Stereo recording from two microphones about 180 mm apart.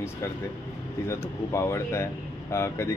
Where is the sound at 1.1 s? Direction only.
15° left (ahead or behind).